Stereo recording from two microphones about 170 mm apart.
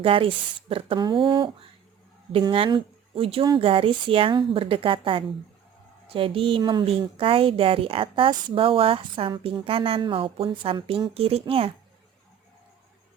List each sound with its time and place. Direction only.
0.0 s a woman's voice: 30° right (ahead or behind)